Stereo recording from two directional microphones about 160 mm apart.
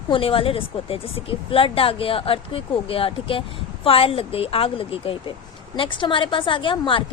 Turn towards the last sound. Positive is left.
turn(degrees=30)  # may be behind; listen again after turning